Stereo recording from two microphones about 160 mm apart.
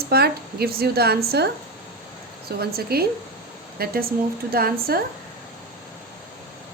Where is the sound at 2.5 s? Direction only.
80° right.